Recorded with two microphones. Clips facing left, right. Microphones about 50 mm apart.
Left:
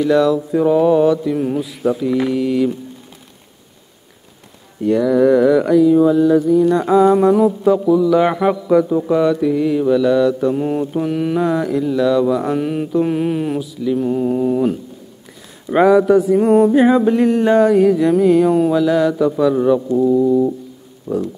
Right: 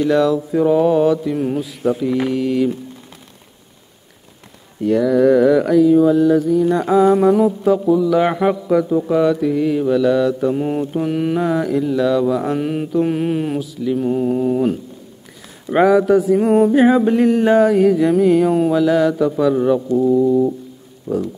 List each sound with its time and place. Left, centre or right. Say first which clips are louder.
0.0 s mantra: left 1 dB; centre
4.8 s mantra: even; centre
21.1 s speech: even; centre